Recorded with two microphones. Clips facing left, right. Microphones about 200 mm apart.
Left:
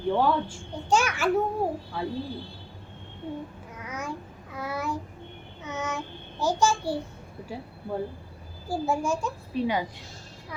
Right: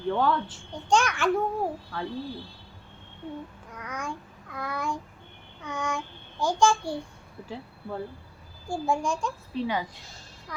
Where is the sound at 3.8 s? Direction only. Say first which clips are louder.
Left 1 dB; 5° left (ahead or behind).